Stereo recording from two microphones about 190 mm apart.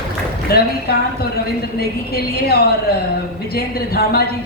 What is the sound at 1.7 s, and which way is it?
A woman's voice, 55° left (ahead or behind).